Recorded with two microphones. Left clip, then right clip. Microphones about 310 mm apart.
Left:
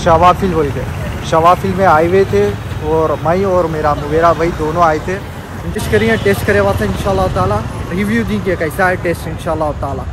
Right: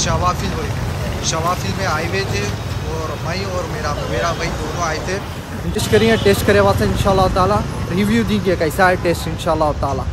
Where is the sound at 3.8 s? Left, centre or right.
Centre.